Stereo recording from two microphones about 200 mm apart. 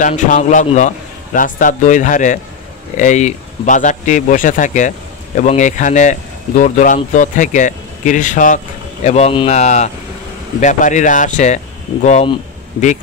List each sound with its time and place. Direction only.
0.0 s a man's voice: 35° left (ahead or behind)